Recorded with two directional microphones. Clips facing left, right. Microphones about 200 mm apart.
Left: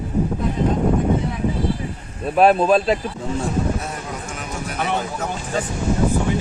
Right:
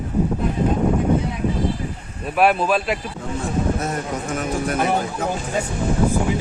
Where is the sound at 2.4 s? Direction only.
30° left (ahead or behind).